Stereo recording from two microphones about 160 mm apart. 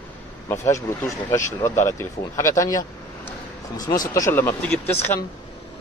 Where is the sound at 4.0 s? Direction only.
20° left (ahead or behind).